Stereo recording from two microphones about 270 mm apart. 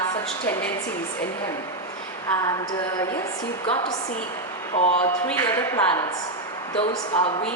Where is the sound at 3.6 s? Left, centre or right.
Left.